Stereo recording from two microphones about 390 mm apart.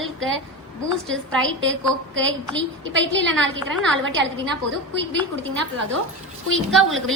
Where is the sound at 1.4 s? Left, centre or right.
Right.